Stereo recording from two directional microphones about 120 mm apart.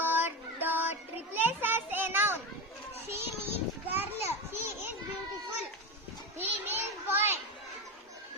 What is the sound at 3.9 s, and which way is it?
Children playing, 20° right (ahead or behind).